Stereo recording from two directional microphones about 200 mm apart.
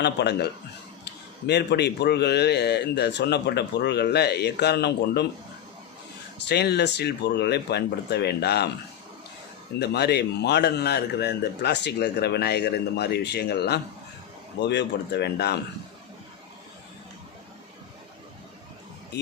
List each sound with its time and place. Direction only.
0.0 s speech: 55° left (ahead or behind)
6.5 s speech: 55° left (ahead or behind)
9.7 s speech: 55° left (ahead or behind)
19.1 s speech: 55° left (ahead or behind)